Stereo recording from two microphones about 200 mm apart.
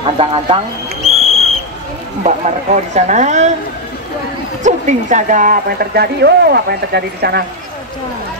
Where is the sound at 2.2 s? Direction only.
35° right (ahead or behind).